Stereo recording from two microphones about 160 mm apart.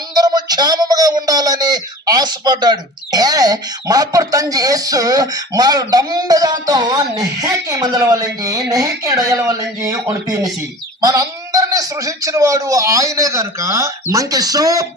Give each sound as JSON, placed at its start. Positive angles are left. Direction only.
{"t": 0.1, "sound": "speech", "side_deg": -25}